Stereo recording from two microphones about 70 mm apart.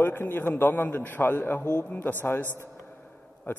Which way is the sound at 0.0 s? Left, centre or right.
Left.